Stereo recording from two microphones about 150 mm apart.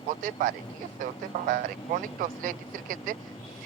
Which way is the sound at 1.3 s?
50° right (ahead or behind).